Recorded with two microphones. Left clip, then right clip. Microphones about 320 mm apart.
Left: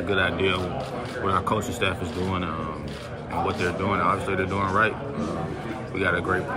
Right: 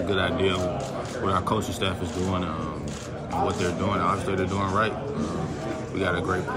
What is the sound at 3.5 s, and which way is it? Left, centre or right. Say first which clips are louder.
Speech: left 1 dB; centre.